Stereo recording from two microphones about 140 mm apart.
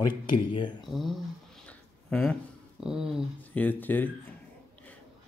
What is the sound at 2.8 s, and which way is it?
Speech, 5° right (ahead or behind).